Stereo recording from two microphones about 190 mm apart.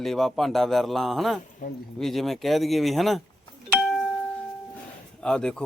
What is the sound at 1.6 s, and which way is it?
Speech, 45° left (ahead or behind).